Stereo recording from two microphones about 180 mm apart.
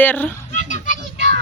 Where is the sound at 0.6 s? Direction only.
45° left (ahead or behind).